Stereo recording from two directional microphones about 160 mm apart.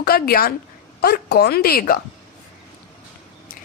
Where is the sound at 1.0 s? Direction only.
90° left; by 2.0 s 70° left (ahead or behind).